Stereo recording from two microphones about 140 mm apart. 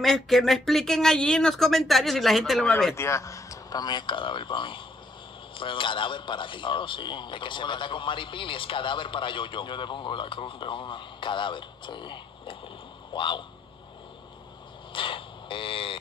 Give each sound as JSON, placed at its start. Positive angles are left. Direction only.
{"t": 0.0, "sound": "speech", "side_deg": 0}
{"t": 3.0, "sound": "a man's voice", "side_deg": 20}
{"t": 14.9, "sound": "a sound", "side_deg": 40}